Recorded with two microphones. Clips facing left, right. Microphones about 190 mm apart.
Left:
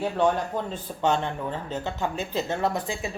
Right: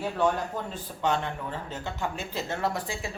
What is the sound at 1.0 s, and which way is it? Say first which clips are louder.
Speech: left 3 dB; 25° left (ahead or behind).